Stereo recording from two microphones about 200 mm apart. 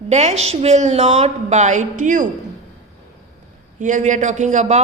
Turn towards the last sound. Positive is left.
turn(degrees=-35)  # may be behind; listen again after turning